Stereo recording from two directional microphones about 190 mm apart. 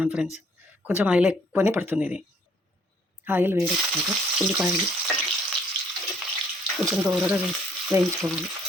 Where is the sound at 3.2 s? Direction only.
10° right (ahead or behind).